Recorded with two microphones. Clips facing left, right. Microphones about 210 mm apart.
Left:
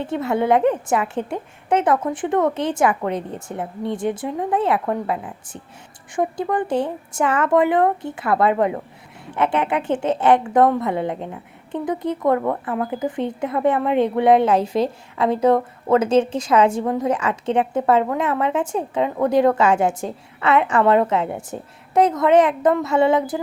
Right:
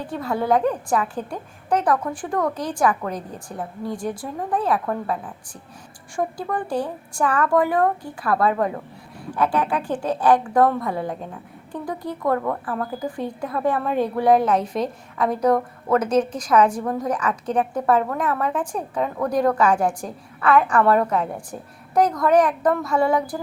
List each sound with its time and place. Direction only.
0.0 s speech: 25° left (ahead or behind)